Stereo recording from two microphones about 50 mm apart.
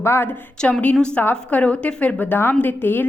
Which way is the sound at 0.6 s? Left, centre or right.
Centre.